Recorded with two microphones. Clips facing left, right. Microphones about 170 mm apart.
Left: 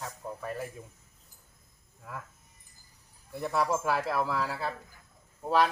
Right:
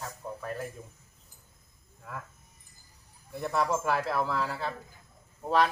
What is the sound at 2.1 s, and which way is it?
Speech, 5° left (ahead or behind).